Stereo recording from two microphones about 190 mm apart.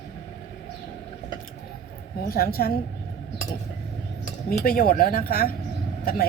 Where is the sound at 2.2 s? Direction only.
50° left (ahead or behind).